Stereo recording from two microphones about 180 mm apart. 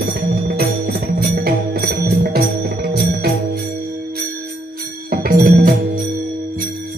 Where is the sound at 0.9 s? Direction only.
60° right (ahead or behind).